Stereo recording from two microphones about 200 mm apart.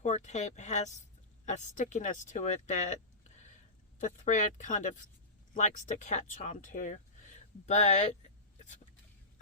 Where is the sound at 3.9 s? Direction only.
40° left (ahead or behind).